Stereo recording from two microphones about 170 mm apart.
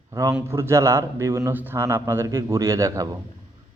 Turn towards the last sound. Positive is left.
turn(degrees=-20)  # may be behind; listen again after turning